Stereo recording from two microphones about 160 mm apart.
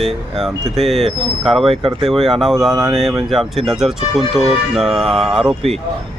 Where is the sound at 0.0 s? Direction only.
Centre (ahead or behind).